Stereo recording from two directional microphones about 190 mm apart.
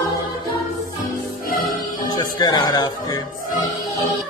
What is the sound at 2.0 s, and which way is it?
Music, 20° left (ahead or behind).